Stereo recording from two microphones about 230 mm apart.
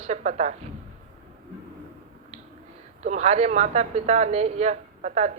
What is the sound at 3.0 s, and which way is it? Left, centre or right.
Speech, right.